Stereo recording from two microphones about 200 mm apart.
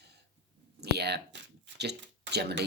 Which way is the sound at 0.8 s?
55° right (ahead or behind).